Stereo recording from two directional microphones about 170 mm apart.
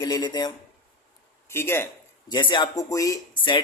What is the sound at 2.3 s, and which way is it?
A man's voice, 25° left (ahead or behind).